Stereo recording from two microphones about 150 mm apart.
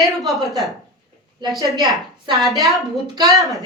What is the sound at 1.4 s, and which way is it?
Speech, 30° right (ahead or behind).